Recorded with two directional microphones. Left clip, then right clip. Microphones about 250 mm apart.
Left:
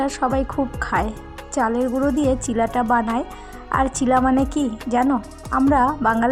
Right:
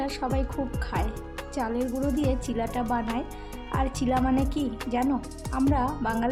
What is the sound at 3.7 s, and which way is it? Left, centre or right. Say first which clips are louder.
A woman's voice: left 9 dB; left.